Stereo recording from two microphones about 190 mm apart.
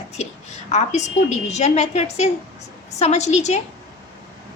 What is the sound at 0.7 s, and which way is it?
A woman's voice, 35° left (ahead or behind).